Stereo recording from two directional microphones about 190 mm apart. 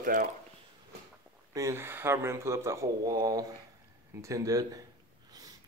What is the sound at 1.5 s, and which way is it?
Speech, 15° right (ahead or behind).